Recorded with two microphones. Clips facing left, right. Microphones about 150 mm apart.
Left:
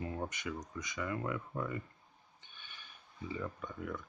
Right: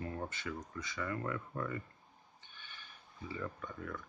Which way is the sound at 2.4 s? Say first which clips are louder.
Even; 20° left (ahead or behind).